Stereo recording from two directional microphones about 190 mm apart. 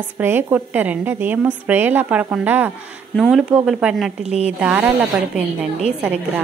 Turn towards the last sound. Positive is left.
turn(degrees=-5)  # may be behind; listen again after turning